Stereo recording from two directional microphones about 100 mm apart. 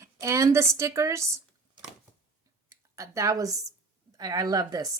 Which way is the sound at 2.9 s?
30° right (ahead or behind).